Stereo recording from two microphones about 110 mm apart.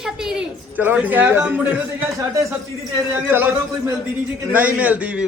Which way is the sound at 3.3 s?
20° right (ahead or behind).